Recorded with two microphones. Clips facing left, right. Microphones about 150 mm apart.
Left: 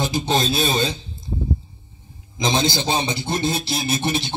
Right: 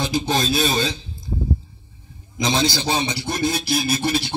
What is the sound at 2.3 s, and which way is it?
A man's voice, 20° left (ahead or behind).